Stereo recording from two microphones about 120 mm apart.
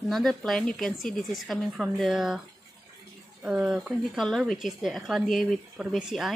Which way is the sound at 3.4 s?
10° right (ahead or behind).